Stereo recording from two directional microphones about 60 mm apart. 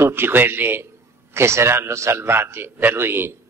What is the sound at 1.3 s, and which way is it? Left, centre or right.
A man's voice, right.